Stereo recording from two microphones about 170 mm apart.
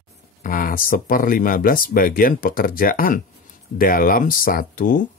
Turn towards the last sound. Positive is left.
turn(degrees=55)  # may be behind; listen again after turning